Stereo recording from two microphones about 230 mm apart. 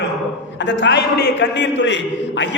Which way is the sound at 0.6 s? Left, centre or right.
Left.